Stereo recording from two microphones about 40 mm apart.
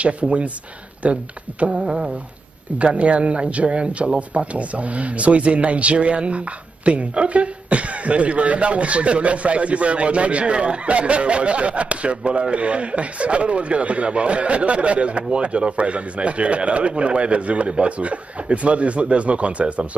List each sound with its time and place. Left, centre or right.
0.0 s speech: right
1.9 s humming: right
2.8 s speech: right